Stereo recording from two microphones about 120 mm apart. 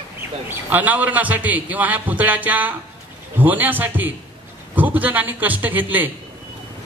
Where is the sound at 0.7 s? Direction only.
15° right (ahead or behind).